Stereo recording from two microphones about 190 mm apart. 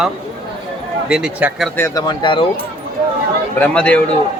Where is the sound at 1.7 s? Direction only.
15° left (ahead or behind).